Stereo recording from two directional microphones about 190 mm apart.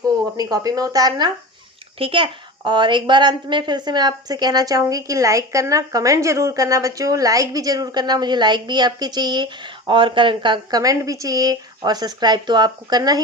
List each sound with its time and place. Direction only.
0.0 s a woman's voice: 20° right (ahead or behind)